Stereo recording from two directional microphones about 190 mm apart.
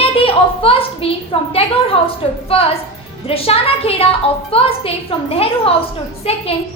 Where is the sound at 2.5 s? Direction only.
30° left (ahead or behind).